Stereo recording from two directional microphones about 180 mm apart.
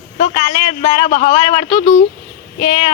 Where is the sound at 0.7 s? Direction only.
35° left (ahead or behind).